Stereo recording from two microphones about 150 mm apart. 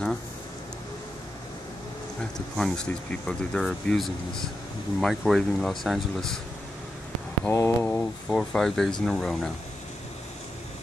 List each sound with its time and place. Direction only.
2.5 s speech: 5° left (ahead or behind)
7.4 s speech: 20° left (ahead or behind)
7.8 s speech: 5° left (ahead or behind)